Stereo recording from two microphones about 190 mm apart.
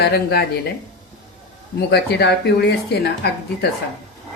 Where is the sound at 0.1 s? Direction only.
55° left (ahead or behind).